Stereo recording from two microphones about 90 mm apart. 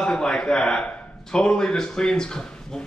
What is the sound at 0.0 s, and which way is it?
A man's voice, 10° left (ahead or behind).